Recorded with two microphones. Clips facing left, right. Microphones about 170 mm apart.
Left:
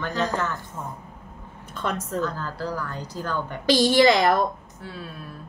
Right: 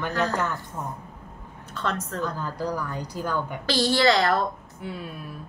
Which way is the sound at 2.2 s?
15° right (ahead or behind).